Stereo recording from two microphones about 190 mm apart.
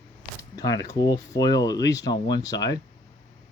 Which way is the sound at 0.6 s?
20° left (ahead or behind).